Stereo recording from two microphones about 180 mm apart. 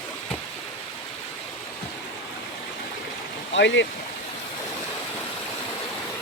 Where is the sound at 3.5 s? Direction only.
90° left.